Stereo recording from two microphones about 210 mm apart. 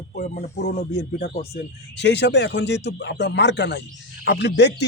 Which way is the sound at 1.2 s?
55° left (ahead or behind).